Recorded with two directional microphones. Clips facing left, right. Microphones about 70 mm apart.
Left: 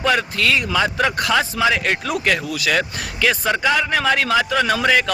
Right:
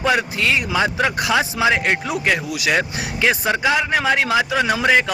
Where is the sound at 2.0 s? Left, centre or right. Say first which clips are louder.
Even; centre.